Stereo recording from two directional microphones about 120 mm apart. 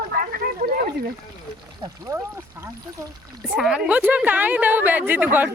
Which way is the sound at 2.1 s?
20° right (ahead or behind).